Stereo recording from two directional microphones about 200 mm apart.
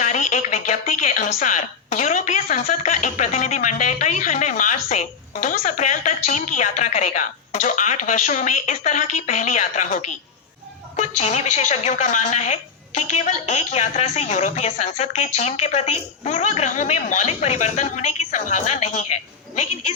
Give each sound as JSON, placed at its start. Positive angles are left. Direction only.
{"t": 0.0, "sound": "a woman's voice", "side_deg": 35}